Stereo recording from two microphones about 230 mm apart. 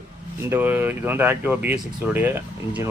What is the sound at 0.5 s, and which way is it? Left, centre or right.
Speech, centre.